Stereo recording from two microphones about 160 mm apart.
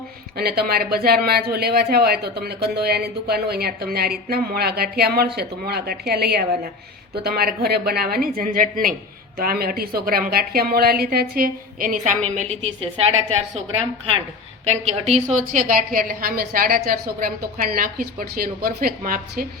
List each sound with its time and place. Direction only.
0.3 s a woman's voice: 75° right (ahead or behind); by 13.4 s 40° right (ahead or behind)
14.7 s a woman's voice: 40° right (ahead or behind); by 19.5 s 65° right (ahead or behind)